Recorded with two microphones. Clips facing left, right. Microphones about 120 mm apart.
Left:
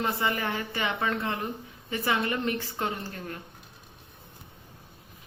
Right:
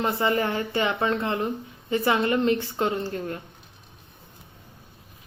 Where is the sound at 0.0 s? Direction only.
30° right (ahead or behind).